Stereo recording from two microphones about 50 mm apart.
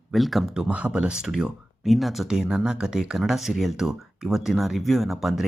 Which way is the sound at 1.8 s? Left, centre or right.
Centre.